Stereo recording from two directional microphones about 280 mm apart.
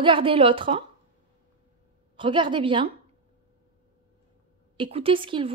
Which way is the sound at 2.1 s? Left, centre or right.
Centre.